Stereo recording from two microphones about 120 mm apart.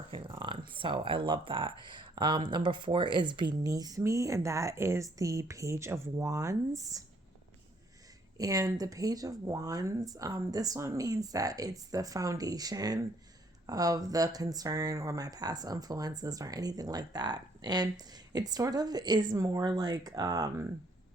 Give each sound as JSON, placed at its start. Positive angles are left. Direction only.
{"t": 0.1, "sound": "speech", "side_deg": -45}
{"t": 8.4, "sound": "speech", "side_deg": -30}